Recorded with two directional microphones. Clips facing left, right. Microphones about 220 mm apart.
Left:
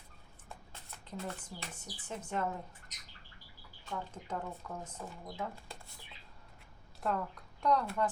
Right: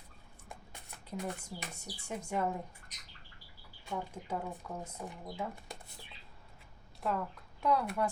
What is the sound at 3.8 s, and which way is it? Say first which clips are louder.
Speech: right 2 dB; 10° right (ahead or behind).